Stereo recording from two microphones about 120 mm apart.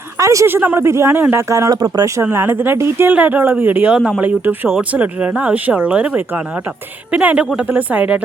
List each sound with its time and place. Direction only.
0.2 s speech: 25° right (ahead or behind)
2.2 s speech: 20° right (ahead or behind)